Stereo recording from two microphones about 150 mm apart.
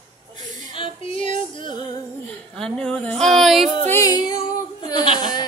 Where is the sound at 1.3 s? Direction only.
35° left (ahead or behind).